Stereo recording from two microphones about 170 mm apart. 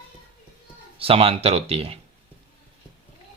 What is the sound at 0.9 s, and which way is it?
Speech, 35° right (ahead or behind).